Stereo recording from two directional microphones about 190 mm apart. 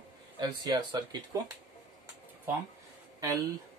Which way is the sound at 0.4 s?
25° right (ahead or behind).